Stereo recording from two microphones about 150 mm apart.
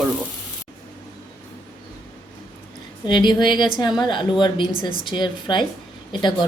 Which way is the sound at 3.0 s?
30° left (ahead or behind).